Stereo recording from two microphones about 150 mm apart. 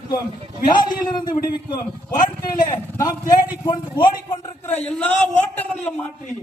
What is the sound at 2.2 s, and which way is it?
A man's voice, 25° left (ahead or behind).